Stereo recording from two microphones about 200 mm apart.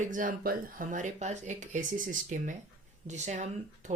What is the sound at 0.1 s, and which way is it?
Speech, 45° right (ahead or behind).